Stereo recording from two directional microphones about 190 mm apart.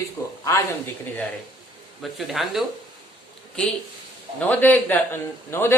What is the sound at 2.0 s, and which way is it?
Speech, centre (ahead or behind).